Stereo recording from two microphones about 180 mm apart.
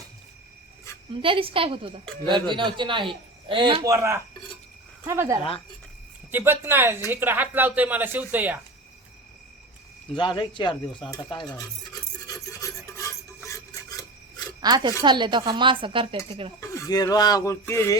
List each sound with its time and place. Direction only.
1.2 s speech: 30° right (ahead or behind)
3.9 s a woman's voice: 15° right (ahead or behind)
5.4 s speech: 30° left (ahead or behind)
6.3 s a woman's voice: 10° right (ahead or behind)
10.2 s speech: 25° left (ahead or behind)
12.5 s a sound: 15° left (ahead or behind)
14.6 s speech: 25° right (ahead or behind)
16.6 s speech: 15° left (ahead or behind)